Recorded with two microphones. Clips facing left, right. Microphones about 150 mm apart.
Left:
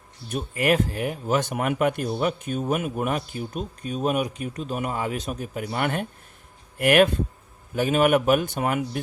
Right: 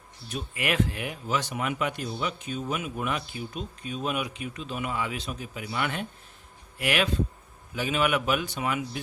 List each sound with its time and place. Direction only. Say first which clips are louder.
0.3 s speech: left 8 dB; 45° left (ahead or behind)